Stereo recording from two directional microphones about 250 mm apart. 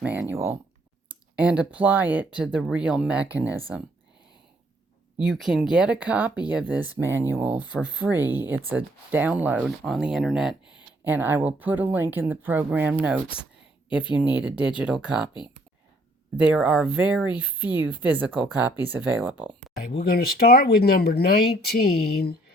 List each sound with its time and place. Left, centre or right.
0.0 s speech: centre
5.1 s speech: centre
16.4 s speech: centre
20.0 s speech: left